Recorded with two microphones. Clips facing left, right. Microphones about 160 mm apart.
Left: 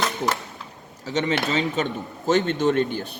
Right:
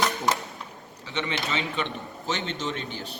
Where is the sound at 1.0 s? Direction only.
40° left (ahead or behind).